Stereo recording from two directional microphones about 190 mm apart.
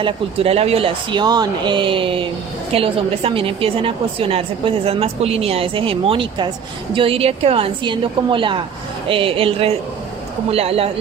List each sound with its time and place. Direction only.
0.0 s a woman's voice: 30° right (ahead or behind)